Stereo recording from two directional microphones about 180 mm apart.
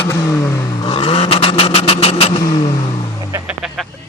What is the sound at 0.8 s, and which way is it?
Vehicle, 30° left (ahead or behind).